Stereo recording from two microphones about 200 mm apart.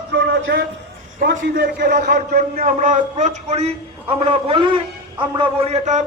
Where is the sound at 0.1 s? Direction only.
55° right (ahead or behind).